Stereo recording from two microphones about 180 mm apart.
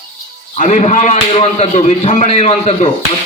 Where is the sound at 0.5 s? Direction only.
40° left (ahead or behind).